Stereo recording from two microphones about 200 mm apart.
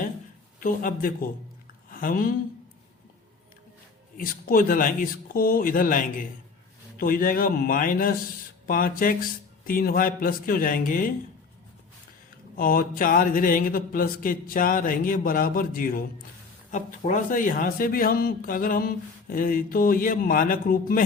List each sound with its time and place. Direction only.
0.6 s speech: 45° left (ahead or behind)
4.2 s speech: 45° left (ahead or behind)
12.5 s speech: 45° left (ahead or behind)